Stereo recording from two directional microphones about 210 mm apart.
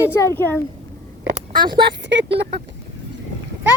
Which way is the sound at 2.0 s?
55° right (ahead or behind).